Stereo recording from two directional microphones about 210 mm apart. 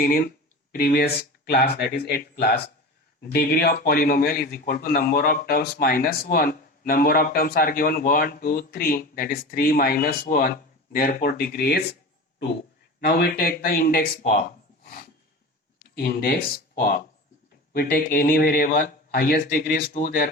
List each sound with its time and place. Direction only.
0.0 s a man's voice: 45° left (ahead or behind)
13.0 s a man's voice: 45° left (ahead or behind)
16.0 s a man's voice: 45° left (ahead or behind)